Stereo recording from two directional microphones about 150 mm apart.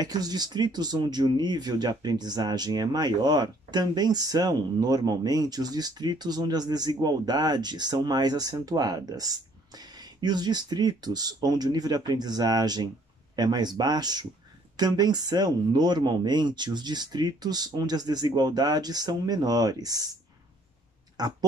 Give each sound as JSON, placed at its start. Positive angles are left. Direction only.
{"t": 0.0, "sound": "speech", "side_deg": -25}
{"t": 21.2, "sound": "speech", "side_deg": -25}